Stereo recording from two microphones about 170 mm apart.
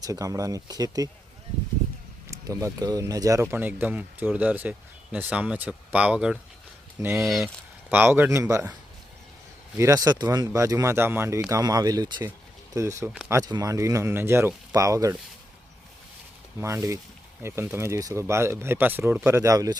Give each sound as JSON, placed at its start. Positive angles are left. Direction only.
{"t": 0.0, "sound": "speech", "side_deg": -20}
{"t": 2.2, "sound": "speech", "side_deg": -20}
{"t": 9.7, "sound": "speech", "side_deg": -20}
{"t": 13.4, "sound": "speech", "side_deg": -20}
{"t": 16.6, "sound": "speech", "side_deg": -15}